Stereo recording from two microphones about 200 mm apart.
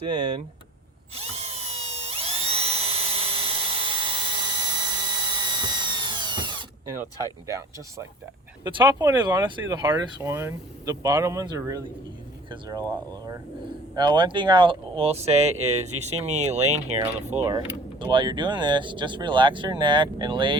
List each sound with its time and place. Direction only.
0.1 s speech: 25° right (ahead or behind)
1.1 s drill: 30° right (ahead or behind)
7.4 s speech: 15° right (ahead or behind); by 16.7 s 35° right (ahead or behind)
17.4 s speech: 20° right (ahead or behind)